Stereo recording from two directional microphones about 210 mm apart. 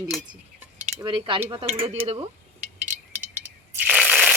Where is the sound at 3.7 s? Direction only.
10° right (ahead or behind).